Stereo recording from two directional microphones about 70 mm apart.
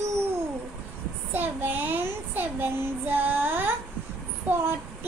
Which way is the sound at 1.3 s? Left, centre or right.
Right.